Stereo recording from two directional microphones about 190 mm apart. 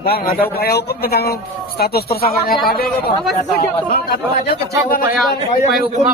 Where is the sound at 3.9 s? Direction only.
55° left (ahead or behind).